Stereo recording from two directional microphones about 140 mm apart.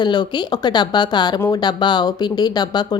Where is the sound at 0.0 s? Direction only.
30° left (ahead or behind).